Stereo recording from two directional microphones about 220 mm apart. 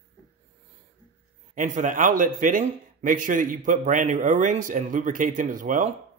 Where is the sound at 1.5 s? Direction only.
35° right (ahead or behind).